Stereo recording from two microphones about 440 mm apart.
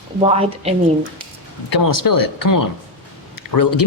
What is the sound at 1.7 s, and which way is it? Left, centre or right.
Speech, left.